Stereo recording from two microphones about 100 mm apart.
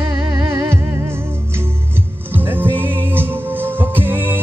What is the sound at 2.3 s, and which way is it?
Music, 20° right (ahead or behind).